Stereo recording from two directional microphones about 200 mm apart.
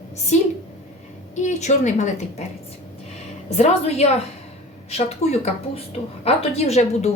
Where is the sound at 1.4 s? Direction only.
35° left (ahead or behind).